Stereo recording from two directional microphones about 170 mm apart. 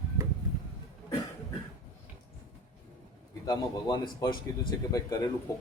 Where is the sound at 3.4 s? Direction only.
25° left (ahead or behind).